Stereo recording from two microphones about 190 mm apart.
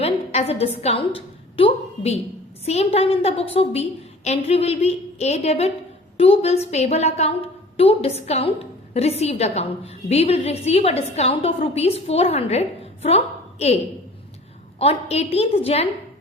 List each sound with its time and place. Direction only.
0.0 s a woman's voice: 30° left (ahead or behind)
14.8 s a woman's voice: 30° left (ahead or behind)